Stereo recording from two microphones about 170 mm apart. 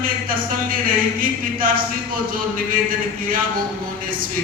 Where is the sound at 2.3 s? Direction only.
55° right (ahead or behind).